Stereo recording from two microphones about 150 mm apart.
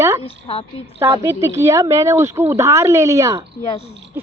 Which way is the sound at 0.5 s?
35° left (ahead or behind).